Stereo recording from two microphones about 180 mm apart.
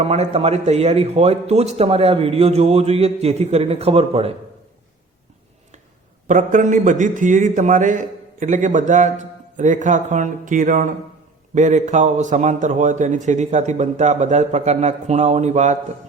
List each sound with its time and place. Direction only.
0.0 s a man's voice: 35° right (ahead or behind)
6.2 s a man's voice: 45° right (ahead or behind)